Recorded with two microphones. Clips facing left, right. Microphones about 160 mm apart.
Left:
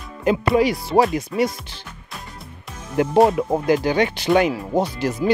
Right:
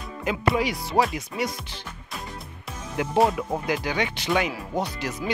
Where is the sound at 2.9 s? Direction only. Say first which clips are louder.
Left 6 dB; 45° left (ahead or behind).